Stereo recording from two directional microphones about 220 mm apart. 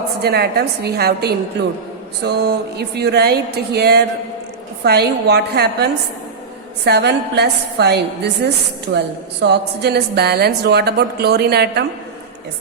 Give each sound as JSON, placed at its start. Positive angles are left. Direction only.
{"t": 0.2, "sound": "a woman's voice", "side_deg": -45}
{"t": 9.4, "sound": "a woman's voice", "side_deg": -50}